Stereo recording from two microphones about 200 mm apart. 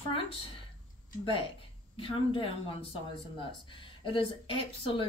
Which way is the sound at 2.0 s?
25° left (ahead or behind).